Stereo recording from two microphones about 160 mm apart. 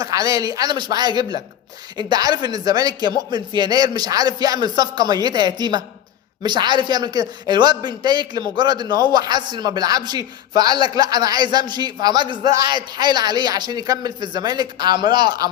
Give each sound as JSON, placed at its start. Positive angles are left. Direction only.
{"t": 0.0, "sound": "a man's voice", "side_deg": -20}